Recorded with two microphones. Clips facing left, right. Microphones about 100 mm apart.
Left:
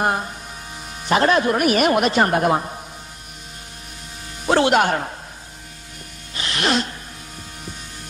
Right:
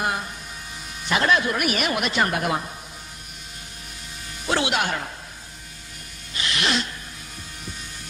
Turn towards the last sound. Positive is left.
turn(degrees=45)  # may be behind; listen again after turning